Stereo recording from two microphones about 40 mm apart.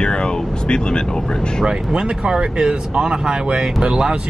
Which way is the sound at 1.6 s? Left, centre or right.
Right.